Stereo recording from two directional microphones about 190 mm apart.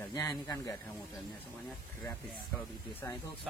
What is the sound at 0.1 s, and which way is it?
Speech, 20° left (ahead or behind).